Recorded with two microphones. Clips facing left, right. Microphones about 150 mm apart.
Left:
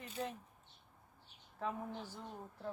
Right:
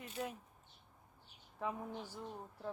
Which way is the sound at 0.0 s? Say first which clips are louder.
Even; 5° right (ahead or behind).